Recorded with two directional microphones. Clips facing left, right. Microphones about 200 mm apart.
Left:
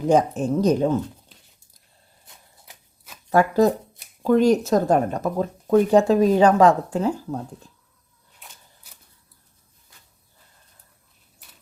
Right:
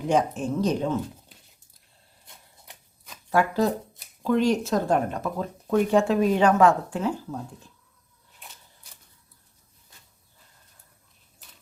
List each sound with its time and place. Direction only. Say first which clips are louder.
0.1 s speech: left 5 dB; 40° left (ahead or behind)
2.2 s a sound: even; centre (ahead or behind)
3.2 s speech: left 5 dB; 45° left (ahead or behind)